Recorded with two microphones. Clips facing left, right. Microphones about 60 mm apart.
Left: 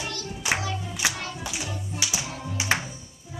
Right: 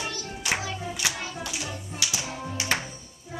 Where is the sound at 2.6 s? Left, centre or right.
Centre.